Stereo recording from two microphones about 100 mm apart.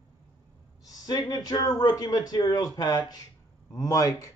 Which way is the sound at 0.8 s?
40° left (ahead or behind).